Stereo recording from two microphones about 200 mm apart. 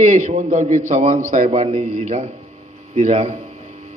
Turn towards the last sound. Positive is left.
turn(degrees=-35)  # may be behind; listen again after turning